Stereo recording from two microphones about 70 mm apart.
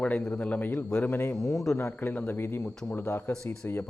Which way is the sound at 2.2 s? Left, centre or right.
Left.